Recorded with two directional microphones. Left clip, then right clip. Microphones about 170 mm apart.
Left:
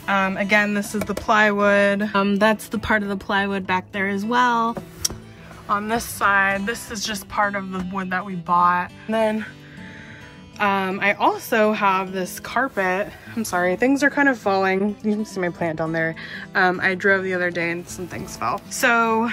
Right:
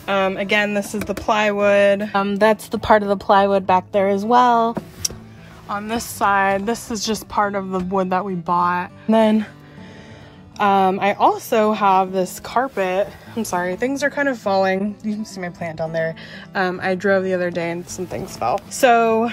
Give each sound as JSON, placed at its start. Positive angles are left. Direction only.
{"t": 0.0, "sound": "a woman's voice", "side_deg": -15}
{"t": 6.1, "sound": "a woman's voice", "side_deg": -15}
{"t": 10.6, "sound": "a woman's voice", "side_deg": -10}